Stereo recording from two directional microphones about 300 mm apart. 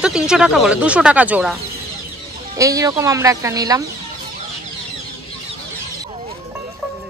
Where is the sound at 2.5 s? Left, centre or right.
Centre.